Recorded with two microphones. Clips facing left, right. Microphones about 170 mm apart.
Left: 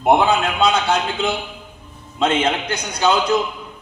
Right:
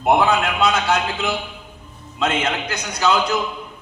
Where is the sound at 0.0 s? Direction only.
25° left (ahead or behind).